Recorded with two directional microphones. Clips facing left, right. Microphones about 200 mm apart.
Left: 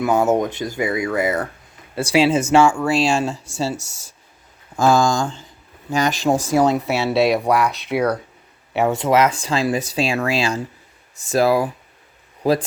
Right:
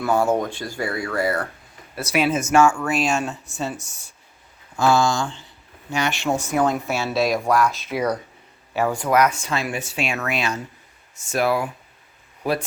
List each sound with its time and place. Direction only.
0.0 s speech: 20° left (ahead or behind)
3.3 s speech: 90° left
4.8 s speech: 45° left (ahead or behind)
6.3 s speech: 90° left
6.7 s speech: 70° left (ahead or behind)
8.7 s speech: 20° left (ahead or behind)